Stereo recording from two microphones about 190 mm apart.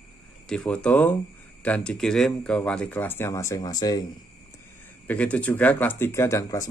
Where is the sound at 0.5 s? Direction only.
5° left (ahead or behind).